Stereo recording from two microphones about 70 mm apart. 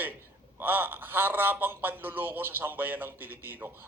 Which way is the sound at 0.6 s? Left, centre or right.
Right.